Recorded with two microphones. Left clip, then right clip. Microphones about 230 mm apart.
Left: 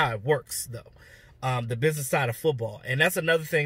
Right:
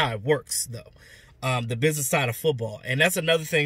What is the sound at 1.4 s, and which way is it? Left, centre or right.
Speech, centre.